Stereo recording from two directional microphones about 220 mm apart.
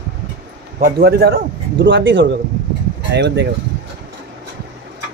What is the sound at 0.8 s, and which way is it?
Speech, 45° right (ahead or behind).